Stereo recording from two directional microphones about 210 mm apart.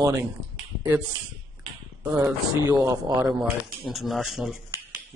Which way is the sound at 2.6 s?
15° right (ahead or behind).